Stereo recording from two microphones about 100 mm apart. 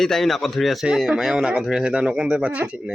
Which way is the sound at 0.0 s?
5° left (ahead or behind).